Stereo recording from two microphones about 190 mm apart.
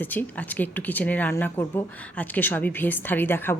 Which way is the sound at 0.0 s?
10° left (ahead or behind).